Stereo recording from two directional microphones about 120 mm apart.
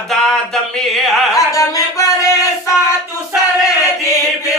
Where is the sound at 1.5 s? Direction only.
25° left (ahead or behind).